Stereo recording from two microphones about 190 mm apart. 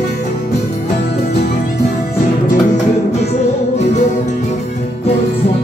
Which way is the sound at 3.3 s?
35° left (ahead or behind).